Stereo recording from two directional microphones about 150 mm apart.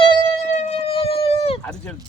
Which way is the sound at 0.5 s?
45° left (ahead or behind).